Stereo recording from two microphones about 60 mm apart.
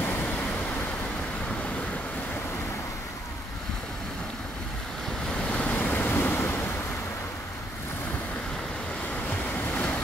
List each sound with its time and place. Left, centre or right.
0.0 s vehicle: left
5.3 s vehicle: centre
5.7 s vehicle: left
9.3 s waves: left